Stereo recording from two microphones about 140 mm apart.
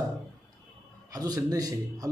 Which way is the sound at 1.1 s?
25° right (ahead or behind).